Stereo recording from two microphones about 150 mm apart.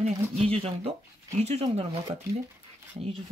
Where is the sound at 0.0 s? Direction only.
40° right (ahead or behind).